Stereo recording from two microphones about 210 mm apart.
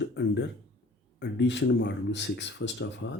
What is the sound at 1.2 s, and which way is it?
Speech, 55° left (ahead or behind).